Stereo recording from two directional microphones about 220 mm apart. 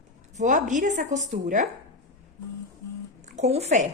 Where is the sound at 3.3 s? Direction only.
30° right (ahead or behind).